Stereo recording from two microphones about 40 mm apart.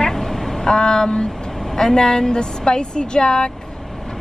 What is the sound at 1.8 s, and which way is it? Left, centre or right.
A woman's voice, centre.